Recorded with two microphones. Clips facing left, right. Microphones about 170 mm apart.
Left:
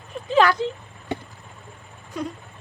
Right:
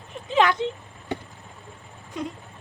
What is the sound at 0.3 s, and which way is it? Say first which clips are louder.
Speech: left 3 dB; 20° right (ahead or behind).